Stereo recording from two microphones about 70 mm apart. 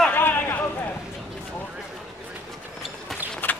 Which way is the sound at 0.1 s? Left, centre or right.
Left.